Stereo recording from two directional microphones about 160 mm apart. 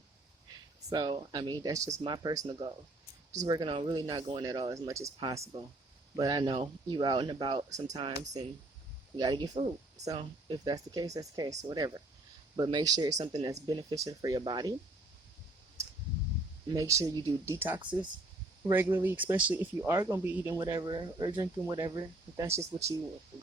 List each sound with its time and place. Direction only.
0.9 s speech: 25° right (ahead or behind)
9.1 s speech: 25° right (ahead or behind)
16.6 s speech: 20° right (ahead or behind)
20.6 s speech: 25° right (ahead or behind)